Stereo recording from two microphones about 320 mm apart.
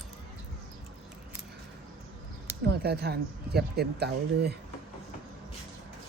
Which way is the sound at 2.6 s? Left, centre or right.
Right.